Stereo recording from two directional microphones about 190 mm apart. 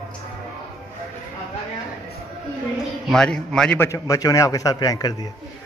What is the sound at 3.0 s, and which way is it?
A man's voice, 5° left (ahead or behind).